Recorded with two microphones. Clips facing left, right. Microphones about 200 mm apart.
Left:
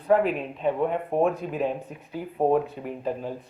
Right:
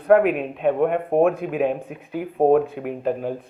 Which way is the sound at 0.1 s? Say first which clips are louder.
Right 5 dB; 60° right (ahead or behind).